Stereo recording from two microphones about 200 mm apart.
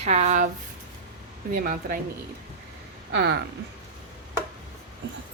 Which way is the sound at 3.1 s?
55° right (ahead or behind).